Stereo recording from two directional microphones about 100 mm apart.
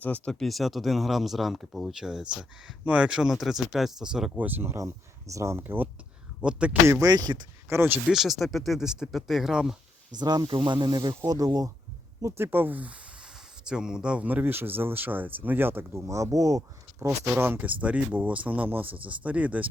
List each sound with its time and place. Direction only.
0.0 s speech: 15° left (ahead or behind)
0.3 s speech: centre (ahead or behind)
6.8 s speech: 25° right (ahead or behind)
7.1 s speech: 45° right (ahead or behind)
7.7 s speech: 25° right (ahead or behind)
8.1 s speech: centre (ahead or behind)
10.2 s speech: 45° right (ahead or behind)
10.5 s speech: 55° right (ahead or behind); by 11.7 s 35° right (ahead or behind)
12.4 s speech: 20° right (ahead or behind)
17.3 s speech: 20° right (ahead or behind)